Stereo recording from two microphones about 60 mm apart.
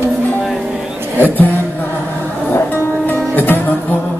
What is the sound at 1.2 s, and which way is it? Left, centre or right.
Music, left.